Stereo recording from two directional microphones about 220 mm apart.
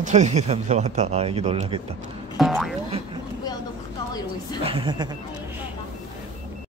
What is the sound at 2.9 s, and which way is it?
Vehicle, 25° right (ahead or behind).